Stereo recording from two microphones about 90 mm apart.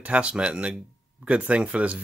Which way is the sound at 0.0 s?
15° right (ahead or behind).